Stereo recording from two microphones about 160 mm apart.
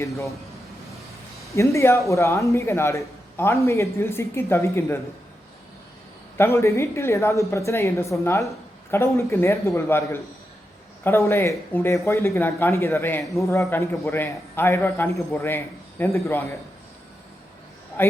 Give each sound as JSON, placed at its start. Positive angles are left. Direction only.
{"t": 0.0, "sound": "speech", "side_deg": 20}
{"t": 1.5, "sound": "a man's voice", "side_deg": 20}
{"t": 6.3, "sound": "a man's voice", "side_deg": 15}